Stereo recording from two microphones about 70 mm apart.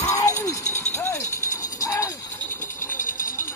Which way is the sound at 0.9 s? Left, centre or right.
Left.